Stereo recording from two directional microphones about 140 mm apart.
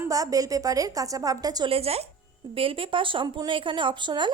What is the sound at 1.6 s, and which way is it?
A woman's voice, 45° right (ahead or behind).